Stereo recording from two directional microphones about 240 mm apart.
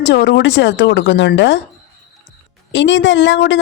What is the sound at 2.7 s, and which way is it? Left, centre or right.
Speech, left.